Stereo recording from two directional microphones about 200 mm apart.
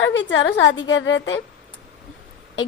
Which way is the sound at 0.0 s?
65° left (ahead or behind).